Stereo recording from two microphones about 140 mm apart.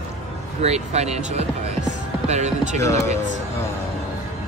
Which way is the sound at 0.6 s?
50° right (ahead or behind).